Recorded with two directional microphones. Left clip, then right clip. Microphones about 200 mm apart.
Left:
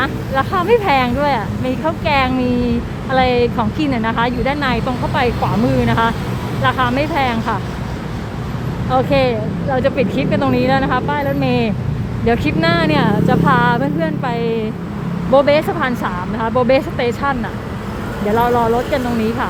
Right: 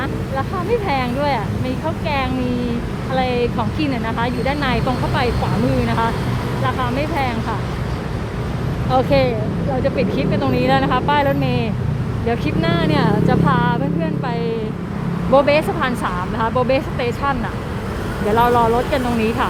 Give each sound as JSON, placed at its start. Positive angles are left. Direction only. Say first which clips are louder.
{"t": 0.0, "sound": "speech", "louder": "left 5 dB", "side_deg": 20}
{"t": 8.9, "sound": "speech", "louder": "left 1 dB", "side_deg": 0}
{"t": 9.8, "sound": "speech", "louder": "left 1 dB", "side_deg": 15}
{"t": 11.3, "sound": "speech", "louder": "left 4 dB", "side_deg": 15}
{"t": 18.3, "sound": "speech", "louder": "even", "side_deg": 0}